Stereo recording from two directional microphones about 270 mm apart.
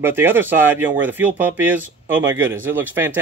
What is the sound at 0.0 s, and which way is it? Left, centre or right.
Speech, centre.